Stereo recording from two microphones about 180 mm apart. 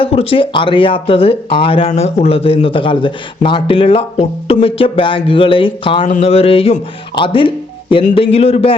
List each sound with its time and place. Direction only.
0.0 s speech: 30° left (ahead or behind)